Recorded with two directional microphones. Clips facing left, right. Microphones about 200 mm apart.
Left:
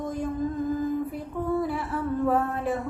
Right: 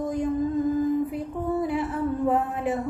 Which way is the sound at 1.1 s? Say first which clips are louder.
Right 1 dB; 20° right (ahead or behind).